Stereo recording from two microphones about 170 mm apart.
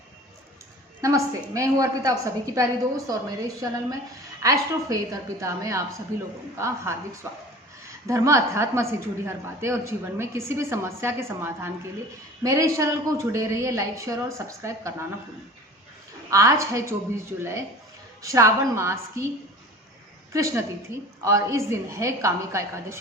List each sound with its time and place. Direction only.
1.0 s a woman's voice: 20° right (ahead or behind)
8.0 s a woman's voice: 15° right (ahead or behind)
16.3 s a woman's voice: 20° right (ahead or behind)
20.3 s a woman's voice: 15° right (ahead or behind)